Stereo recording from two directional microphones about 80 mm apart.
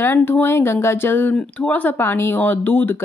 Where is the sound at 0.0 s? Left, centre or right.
Left.